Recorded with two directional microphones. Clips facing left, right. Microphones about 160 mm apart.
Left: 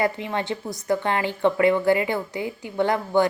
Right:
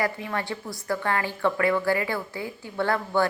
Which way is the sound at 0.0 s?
20° left (ahead or behind).